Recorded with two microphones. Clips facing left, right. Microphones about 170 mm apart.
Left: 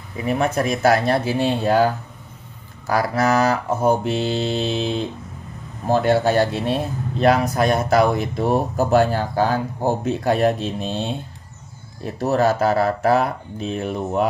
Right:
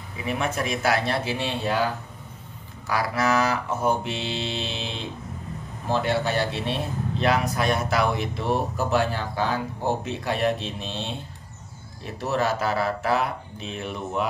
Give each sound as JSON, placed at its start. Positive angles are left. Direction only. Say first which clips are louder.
{"t": 0.2, "sound": "speech", "louder": "left 7 dB", "side_deg": 40}
{"t": 2.9, "sound": "speech", "louder": "left 5 dB", "side_deg": 45}